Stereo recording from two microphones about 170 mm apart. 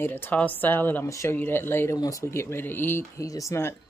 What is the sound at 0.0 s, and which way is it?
Speech, 10° left (ahead or behind).